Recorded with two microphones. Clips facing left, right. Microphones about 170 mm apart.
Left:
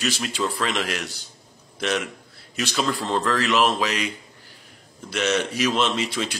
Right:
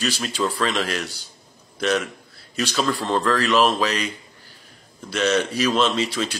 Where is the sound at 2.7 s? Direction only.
10° left (ahead or behind).